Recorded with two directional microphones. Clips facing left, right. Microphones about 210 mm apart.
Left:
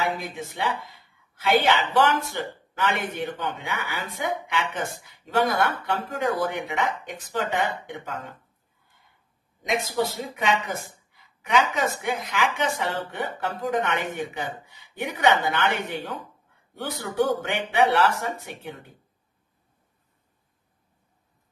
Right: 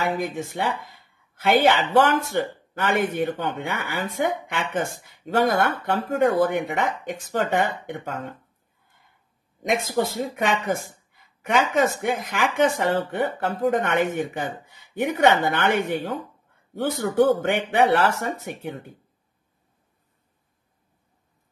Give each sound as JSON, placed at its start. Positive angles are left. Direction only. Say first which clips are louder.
{"t": 0.0, "sound": "speech", "louder": "right 3 dB", "side_deg": -50}
{"t": 9.6, "sound": "speech", "louder": "right 2 dB", "side_deg": -50}
{"t": 17.2, "sound": "speech", "louder": "right 5 dB", "side_deg": -55}